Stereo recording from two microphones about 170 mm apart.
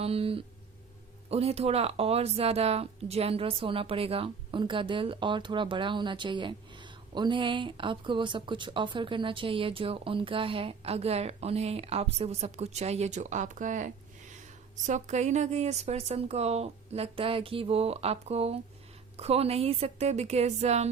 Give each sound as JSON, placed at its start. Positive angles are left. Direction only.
{"t": 0.0, "sound": "a woman's voice", "side_deg": -35}